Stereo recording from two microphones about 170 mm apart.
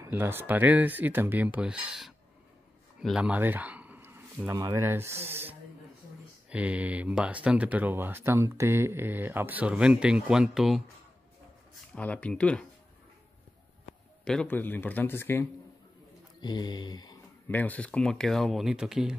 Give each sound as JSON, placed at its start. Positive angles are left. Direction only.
{"t": 0.0, "sound": "speech", "side_deg": -15}
{"t": 3.0, "sound": "a sound", "side_deg": -5}
{"t": 4.5, "sound": "speech", "side_deg": -20}
{"t": 11.9, "sound": "speech", "side_deg": 10}
{"t": 14.2, "sound": "speech", "side_deg": 5}
{"t": 16.3, "sound": "speech", "side_deg": 25}
{"t": 17.5, "sound": "speech", "side_deg": 10}